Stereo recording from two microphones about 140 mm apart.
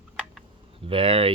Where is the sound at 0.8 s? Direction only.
40° right (ahead or behind).